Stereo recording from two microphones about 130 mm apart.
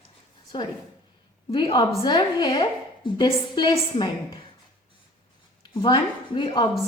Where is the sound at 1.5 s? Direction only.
40° left (ahead or behind).